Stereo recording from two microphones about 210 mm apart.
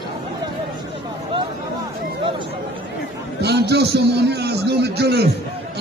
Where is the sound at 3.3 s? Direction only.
50° right (ahead or behind).